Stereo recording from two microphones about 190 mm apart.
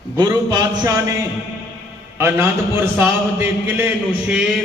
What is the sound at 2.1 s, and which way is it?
A man's voice, 10° right (ahead or behind).